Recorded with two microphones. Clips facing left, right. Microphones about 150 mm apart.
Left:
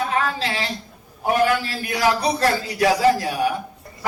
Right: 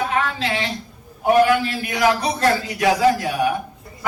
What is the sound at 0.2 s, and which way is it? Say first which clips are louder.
A woman's voice: right 1 dB; 35° left (ahead or behind).